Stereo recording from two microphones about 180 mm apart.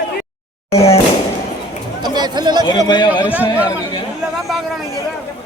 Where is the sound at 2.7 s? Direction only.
25° left (ahead or behind).